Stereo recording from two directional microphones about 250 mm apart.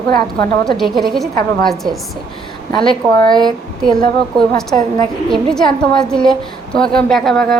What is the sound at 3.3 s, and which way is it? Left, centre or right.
Speech, centre.